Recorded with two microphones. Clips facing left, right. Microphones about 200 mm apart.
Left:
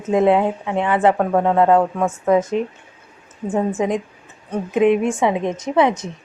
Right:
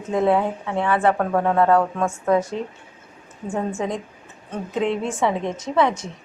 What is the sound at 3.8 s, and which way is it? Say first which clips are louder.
A woman's voice: left 6 dB; 15° left (ahead or behind).